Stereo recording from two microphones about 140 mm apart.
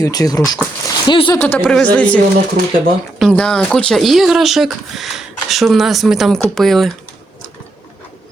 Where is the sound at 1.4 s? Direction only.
10° left (ahead or behind).